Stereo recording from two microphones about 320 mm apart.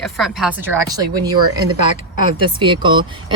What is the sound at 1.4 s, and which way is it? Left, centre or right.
Speech, right.